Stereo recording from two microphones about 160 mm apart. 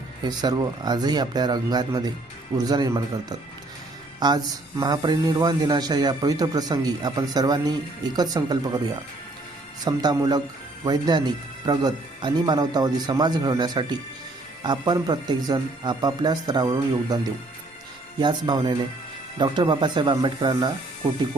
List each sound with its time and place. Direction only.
0.3 s a man's voice: 25° right (ahead or behind)
9.8 s a man's voice: 25° right (ahead or behind)
18.2 s a man's voice: 25° right (ahead or behind)